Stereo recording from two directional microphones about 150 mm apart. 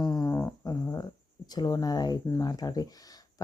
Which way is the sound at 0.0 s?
20° left (ahead or behind).